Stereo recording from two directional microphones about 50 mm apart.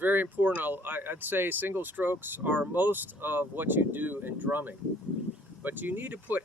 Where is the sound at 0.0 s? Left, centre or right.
Right.